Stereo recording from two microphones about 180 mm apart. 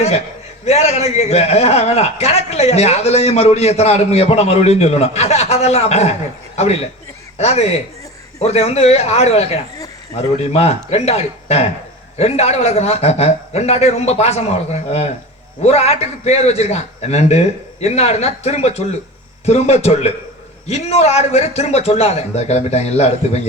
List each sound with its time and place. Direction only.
0.6 s a man's voice: 35° left (ahead or behind)
7.3 s a man's voice: 35° left (ahead or behind)